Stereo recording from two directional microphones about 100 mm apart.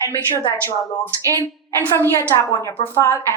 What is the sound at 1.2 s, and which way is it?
Speech, 35° right (ahead or behind).